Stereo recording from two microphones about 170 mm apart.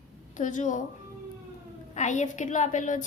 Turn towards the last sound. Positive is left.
turn(degrees=50)  # may be behind; listen again after turning